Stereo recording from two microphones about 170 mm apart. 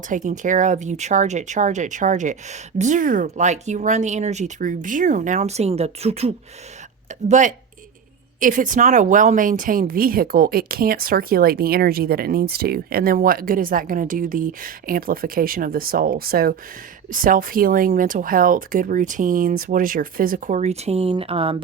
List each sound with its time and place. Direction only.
0.1 s speech: 45° right (ahead or behind)